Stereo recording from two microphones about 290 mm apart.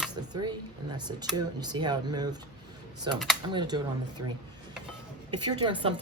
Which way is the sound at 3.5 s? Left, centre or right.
Centre.